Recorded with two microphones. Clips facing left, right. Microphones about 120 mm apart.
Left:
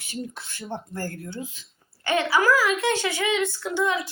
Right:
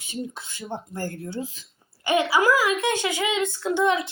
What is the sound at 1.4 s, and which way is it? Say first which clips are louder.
Speech: right 3 dB; 35° right (ahead or behind).